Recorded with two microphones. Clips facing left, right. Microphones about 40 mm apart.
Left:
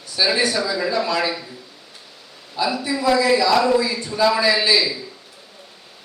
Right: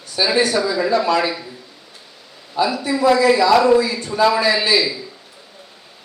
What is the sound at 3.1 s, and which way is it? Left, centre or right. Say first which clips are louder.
Speech: right 2 dB; centre.